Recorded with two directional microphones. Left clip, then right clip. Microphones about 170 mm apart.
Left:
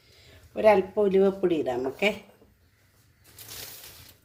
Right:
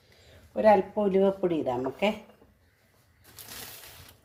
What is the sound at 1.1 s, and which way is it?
Speech, 20° left (ahead or behind).